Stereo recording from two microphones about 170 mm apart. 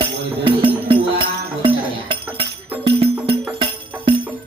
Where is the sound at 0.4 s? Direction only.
30° right (ahead or behind).